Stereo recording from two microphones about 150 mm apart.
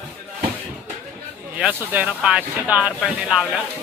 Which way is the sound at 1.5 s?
10° right (ahead or behind).